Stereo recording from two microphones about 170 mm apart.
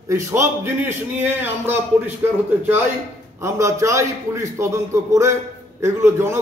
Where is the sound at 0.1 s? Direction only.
15° right (ahead or behind).